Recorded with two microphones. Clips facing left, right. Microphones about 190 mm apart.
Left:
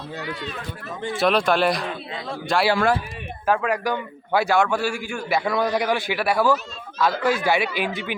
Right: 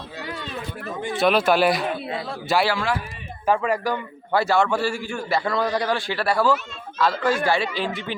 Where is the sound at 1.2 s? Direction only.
5° right (ahead or behind).